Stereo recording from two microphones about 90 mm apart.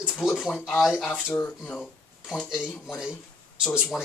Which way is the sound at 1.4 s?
15° left (ahead or behind).